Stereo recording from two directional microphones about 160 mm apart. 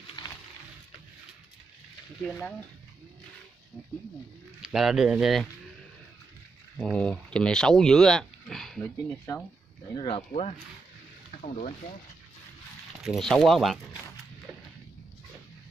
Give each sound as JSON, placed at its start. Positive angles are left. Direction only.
{"t": 0.0, "sound": "music", "side_deg": 25}
{"t": 2.2, "sound": "speech", "side_deg": 10}
{"t": 4.6, "sound": "speech", "side_deg": -5}
{"t": 6.8, "sound": "speech", "side_deg": 5}
{"t": 8.8, "sound": "speech", "side_deg": 15}
{"t": 9.9, "sound": "speech", "side_deg": 35}
{"t": 11.4, "sound": "speech", "side_deg": 50}
{"t": 13.0, "sound": "speech", "side_deg": 0}